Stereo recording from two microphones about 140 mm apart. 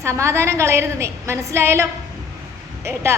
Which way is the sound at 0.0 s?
20° right (ahead or behind).